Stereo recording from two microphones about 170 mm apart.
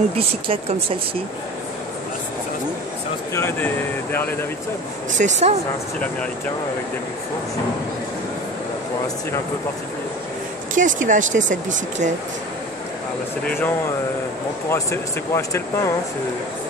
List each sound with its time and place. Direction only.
0.1 s speech: 35° right (ahead or behind)
3.3 s speech: 10° left (ahead or behind)
5.1 s speech: 45° right (ahead or behind)
10.7 s speech: 50° right (ahead or behind)
13.5 s speech: 10° left (ahead or behind)